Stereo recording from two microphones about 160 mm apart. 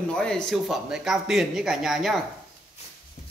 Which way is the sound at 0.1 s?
5° left (ahead or behind).